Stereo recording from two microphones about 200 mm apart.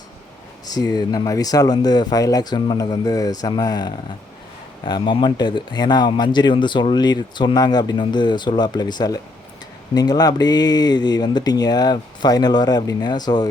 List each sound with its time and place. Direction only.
0.6 s a man's voice: 20° left (ahead or behind)